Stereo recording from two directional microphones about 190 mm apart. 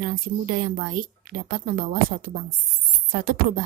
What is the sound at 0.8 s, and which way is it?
A woman's voice, 45° right (ahead or behind).